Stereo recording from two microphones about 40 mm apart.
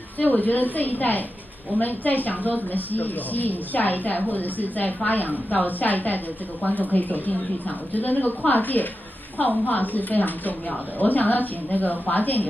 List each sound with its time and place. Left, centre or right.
0.2 s a woman's voice: left